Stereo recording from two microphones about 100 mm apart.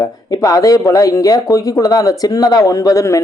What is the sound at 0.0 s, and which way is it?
Speech, 35° left (ahead or behind).